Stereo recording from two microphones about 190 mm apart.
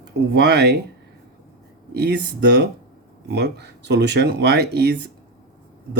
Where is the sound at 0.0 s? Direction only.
60° right (ahead or behind).